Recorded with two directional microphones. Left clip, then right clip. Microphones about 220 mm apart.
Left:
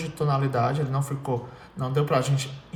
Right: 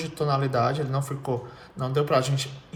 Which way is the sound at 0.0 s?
15° right (ahead or behind).